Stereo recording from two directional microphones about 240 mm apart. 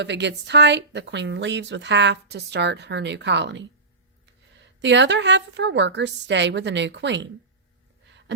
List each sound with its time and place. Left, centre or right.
0.0 s speech: right
4.8 s speech: right